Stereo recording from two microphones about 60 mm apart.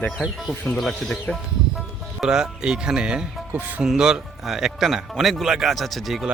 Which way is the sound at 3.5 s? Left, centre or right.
Right.